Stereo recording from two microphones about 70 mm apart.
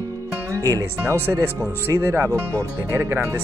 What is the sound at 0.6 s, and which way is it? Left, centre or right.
Speech, right.